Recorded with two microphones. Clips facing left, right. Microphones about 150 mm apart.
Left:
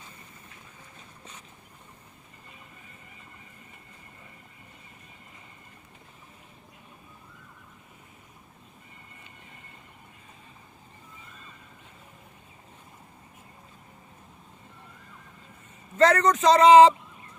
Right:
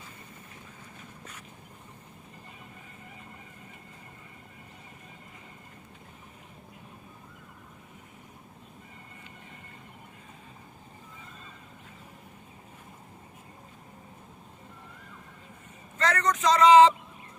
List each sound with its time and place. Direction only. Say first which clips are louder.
16.0 s speech: left 5 dB; 30° left (ahead or behind)